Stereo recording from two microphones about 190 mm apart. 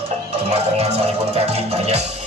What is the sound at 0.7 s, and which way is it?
Music, 35° right (ahead or behind).